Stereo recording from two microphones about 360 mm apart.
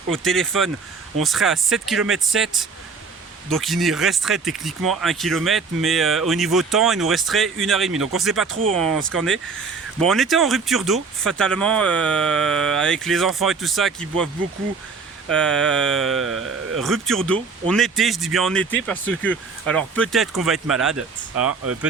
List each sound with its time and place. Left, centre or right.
0.1 s speech: centre
15.3 s speech: centre
21.6 s speech: right